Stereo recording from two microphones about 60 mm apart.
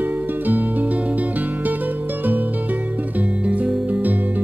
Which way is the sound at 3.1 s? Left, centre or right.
Right.